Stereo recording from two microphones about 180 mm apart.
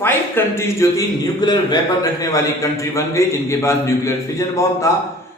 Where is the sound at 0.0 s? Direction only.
10° left (ahead or behind).